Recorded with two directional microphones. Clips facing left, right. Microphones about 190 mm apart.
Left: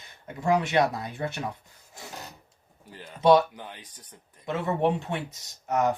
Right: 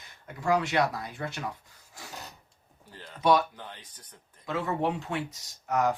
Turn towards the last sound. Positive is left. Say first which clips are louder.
# left 2 dB
turn(degrees=25)  # may be behind; listen again after turning